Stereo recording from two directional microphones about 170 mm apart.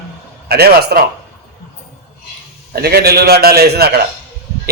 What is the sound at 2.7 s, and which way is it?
A man's voice, 70° right (ahead or behind).